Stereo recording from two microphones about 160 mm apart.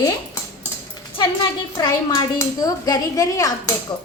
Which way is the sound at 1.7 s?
25° left (ahead or behind).